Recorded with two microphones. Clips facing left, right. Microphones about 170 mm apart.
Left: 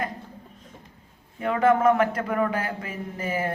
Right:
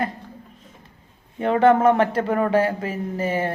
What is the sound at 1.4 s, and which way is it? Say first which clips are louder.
A man's voice: right 4 dB; 30° right (ahead or behind).